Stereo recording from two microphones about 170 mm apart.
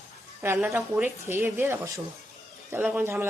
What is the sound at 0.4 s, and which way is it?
A woman's voice, 10° right (ahead or behind).